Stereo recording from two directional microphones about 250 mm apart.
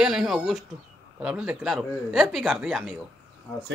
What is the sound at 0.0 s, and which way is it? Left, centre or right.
Speech, centre.